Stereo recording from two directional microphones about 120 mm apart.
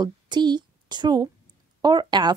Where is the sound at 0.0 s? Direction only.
40° right (ahead or behind).